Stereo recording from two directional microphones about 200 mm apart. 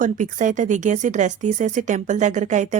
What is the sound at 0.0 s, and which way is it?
A woman's voice, 40° right (ahead or behind).